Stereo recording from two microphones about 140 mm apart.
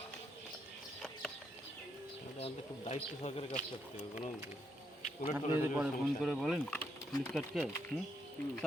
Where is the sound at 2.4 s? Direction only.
45° left (ahead or behind).